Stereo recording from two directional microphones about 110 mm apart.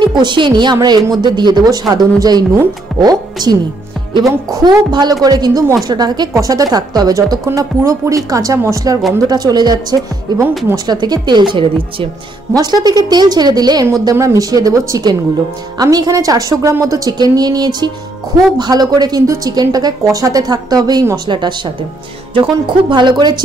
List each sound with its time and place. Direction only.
0.1 s a woman's voice: 45° right (ahead or behind)
12.5 s a woman's voice: 35° right (ahead or behind)